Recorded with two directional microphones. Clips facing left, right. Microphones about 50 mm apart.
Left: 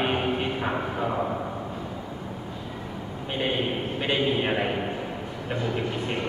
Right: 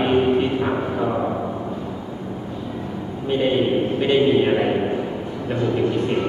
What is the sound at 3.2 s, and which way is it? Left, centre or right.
A man's voice, centre.